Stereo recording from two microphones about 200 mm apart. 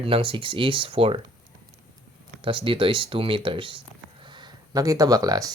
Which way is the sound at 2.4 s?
25° right (ahead or behind).